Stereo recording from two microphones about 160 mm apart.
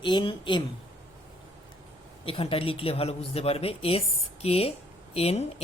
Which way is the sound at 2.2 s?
35° left (ahead or behind).